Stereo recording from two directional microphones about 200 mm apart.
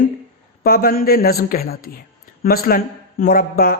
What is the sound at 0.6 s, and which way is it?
A man's voice, 50° left (ahead or behind).